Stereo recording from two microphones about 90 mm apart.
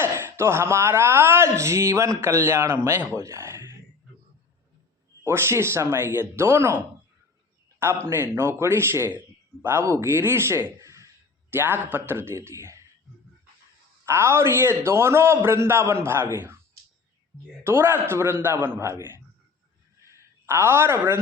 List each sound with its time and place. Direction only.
0.0 s speech: 30° right (ahead or behind)
5.2 s speech: 30° right (ahead or behind)
8.0 s speech: 25° right (ahead or behind)
11.5 s speech: 20° right (ahead or behind)
14.0 s speech: 30° right (ahead or behind)
17.6 s speech: 25° right (ahead or behind)
20.0 s a sound: 30° right (ahead or behind)